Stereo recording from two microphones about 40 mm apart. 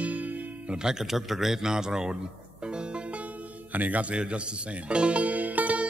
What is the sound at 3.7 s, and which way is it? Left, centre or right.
Speech, right.